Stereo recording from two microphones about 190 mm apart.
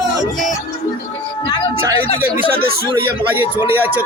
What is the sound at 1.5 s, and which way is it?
Music, 25° left (ahead or behind).